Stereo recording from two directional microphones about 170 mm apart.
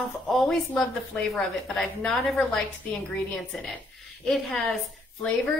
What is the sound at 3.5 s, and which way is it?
Speech, 5° left (ahead or behind).